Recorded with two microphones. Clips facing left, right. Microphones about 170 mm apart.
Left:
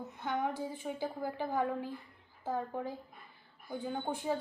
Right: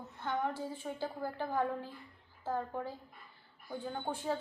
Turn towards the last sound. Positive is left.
turn(degrees=15)  # may be behind; listen again after turning